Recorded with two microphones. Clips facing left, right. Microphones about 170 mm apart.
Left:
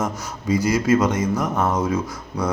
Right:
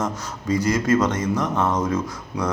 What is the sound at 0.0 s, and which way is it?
Speech, 10° left (ahead or behind).